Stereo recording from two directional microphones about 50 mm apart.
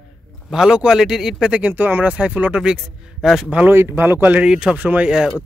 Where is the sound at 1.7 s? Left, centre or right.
Right.